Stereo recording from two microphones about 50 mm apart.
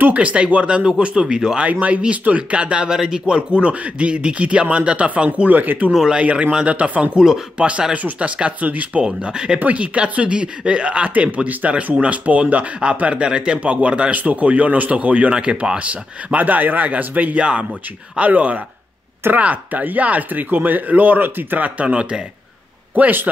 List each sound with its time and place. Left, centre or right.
0.1 s speech: right
0.8 s speech: centre
1.7 s speech: right
5.5 s speech: right
6.5 s speech: right
7.2 s speech: centre
9.0 s speech: centre
9.6 s speech: right
15.8 s speech: right
17.4 s speech: centre
21.8 s speech: centre
22.9 s speech: right